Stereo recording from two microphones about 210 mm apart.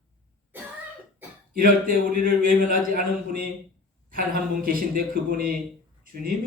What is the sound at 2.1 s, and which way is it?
A man's voice, 40° right (ahead or behind).